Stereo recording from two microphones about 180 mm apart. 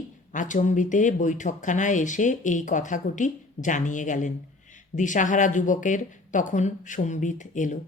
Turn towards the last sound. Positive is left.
turn(degrees=45)  # may be behind; listen again after turning